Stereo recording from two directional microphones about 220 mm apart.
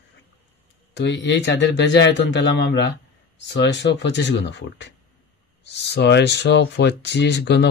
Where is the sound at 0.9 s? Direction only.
55° left (ahead or behind).